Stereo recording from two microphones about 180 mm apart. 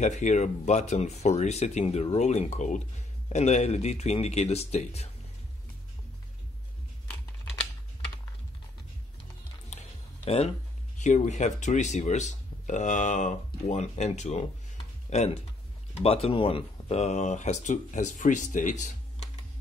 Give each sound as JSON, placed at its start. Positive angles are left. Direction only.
{"t": 0.0, "sound": "speech", "side_deg": 40}
{"t": 9.7, "sound": "a sound", "side_deg": 35}
{"t": 11.0, "sound": "speech", "side_deg": 40}